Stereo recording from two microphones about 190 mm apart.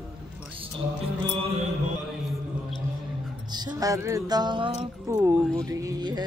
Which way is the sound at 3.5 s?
20° right (ahead or behind).